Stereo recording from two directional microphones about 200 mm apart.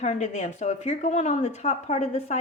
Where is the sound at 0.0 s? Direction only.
35° left (ahead or behind).